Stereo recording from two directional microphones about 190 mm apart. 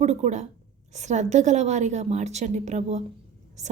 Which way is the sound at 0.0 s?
35° right (ahead or behind).